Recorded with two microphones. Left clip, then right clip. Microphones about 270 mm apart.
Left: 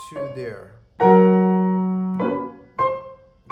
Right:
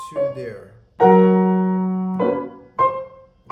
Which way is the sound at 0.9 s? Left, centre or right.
Centre.